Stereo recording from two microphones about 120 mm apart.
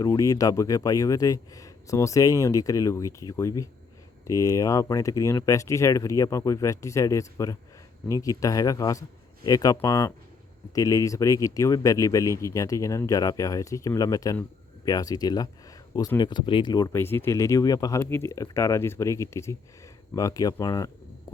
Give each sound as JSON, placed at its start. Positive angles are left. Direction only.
{"t": 0.0, "sound": "a man's voice", "side_deg": 30}
{"t": 16.9, "sound": "a man's voice", "side_deg": 20}
{"t": 18.0, "sound": "a man's voice", "side_deg": 20}